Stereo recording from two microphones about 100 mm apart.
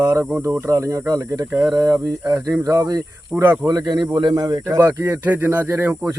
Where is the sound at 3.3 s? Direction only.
15° right (ahead or behind).